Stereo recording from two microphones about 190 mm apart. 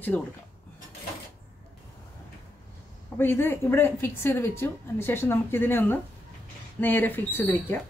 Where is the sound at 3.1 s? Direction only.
10° left (ahead or behind).